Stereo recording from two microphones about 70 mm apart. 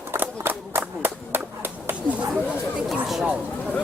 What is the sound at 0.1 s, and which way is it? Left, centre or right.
Run, right.